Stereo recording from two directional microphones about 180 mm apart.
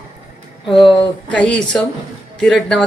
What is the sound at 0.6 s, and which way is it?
Speech, 25° left (ahead or behind).